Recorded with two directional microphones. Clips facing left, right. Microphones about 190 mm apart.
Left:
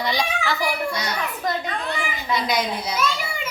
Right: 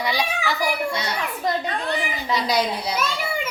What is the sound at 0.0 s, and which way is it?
Speech, 10° right (ahead or behind).